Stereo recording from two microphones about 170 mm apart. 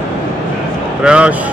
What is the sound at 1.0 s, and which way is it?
Speech, 5° right (ahead or behind).